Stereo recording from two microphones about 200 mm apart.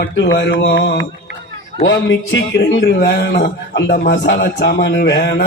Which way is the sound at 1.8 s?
65° left (ahead or behind).